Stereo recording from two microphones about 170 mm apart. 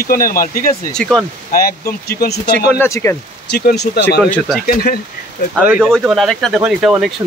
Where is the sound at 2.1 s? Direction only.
65° left (ahead or behind).